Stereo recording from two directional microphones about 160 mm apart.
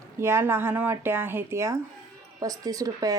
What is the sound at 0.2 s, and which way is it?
A woman's voice, 15° right (ahead or behind).